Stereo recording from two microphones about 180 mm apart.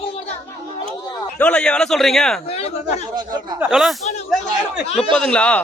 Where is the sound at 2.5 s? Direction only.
35° left (ahead or behind).